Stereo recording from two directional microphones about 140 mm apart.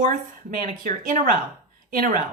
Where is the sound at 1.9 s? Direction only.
75° right (ahead or behind).